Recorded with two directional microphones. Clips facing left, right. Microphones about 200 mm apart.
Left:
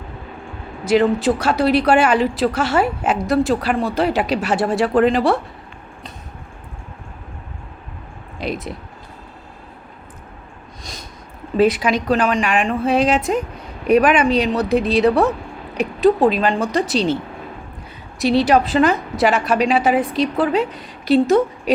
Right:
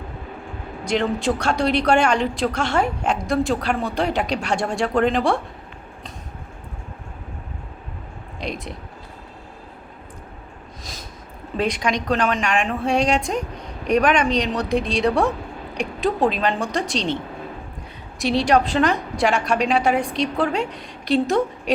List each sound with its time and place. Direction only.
0.9 s a woman's voice: 5° left (ahead or behind)
8.4 s a sound: centre (ahead or behind)
11.5 s a woman's voice: 5° left (ahead or behind)
18.2 s a woman's voice: centre (ahead or behind)